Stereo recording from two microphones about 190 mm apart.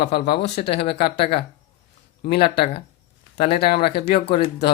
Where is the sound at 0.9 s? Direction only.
55° left (ahead or behind).